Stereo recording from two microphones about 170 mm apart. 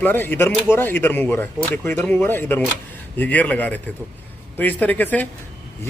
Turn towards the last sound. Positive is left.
turn(degrees=10)  # may be behind; listen again after turning